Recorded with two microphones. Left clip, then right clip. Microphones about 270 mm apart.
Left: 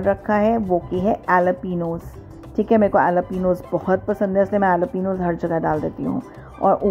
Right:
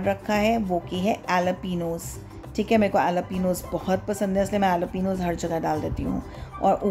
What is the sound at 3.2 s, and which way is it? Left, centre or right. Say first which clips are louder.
Speech: left 6 dB; centre.